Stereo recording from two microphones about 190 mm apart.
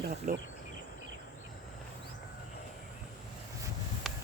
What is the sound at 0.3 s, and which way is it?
Speech, 45° right (ahead or behind).